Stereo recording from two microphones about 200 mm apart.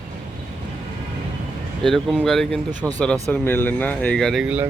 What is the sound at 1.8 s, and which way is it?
Speech, centre (ahead or behind).